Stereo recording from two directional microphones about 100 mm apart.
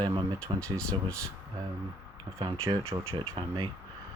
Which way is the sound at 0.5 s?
50° right (ahead or behind).